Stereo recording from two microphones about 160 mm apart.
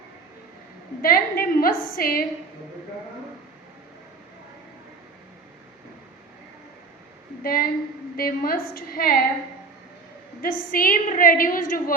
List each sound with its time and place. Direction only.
1.0 s a woman's voice: 65° left (ahead or behind)
7.4 s a woman's voice: 65° left (ahead or behind)
10.4 s a woman's voice: 65° left (ahead or behind)